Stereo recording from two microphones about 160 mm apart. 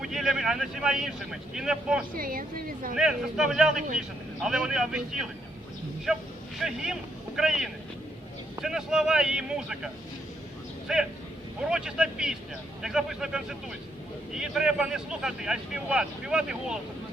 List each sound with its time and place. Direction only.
0.0 s speech: centre (ahead or behind)
2.1 s a woman's voice: 65° right (ahead or behind)
2.9 s speech: 5° right (ahead or behind)
6.6 s speech: 5° right (ahead or behind)